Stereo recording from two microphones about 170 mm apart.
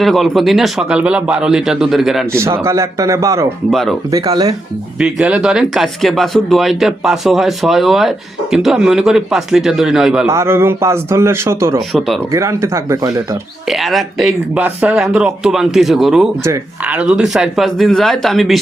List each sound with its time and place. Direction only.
0.0 s speech: centre (ahead or behind)
2.2 s a man's voice: 15° right (ahead or behind)
3.7 s speech: centre (ahead or behind)
4.1 s speech: 20° right (ahead or behind)
4.9 s speech: 5° right (ahead or behind)
10.2 s a man's voice: 15° right (ahead or behind)
11.8 s speech: centre (ahead or behind)
12.3 s a man's voice: 15° right (ahead or behind)
13.7 s speech: centre (ahead or behind)